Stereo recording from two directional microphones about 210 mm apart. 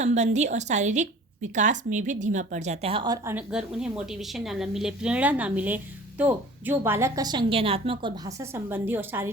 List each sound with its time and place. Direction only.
0.0 s a woman's voice: 35° right (ahead or behind)
3.3 s a woman's voice: 5° right (ahead or behind)